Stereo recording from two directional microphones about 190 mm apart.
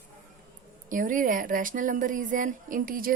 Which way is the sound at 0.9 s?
45° right (ahead or behind).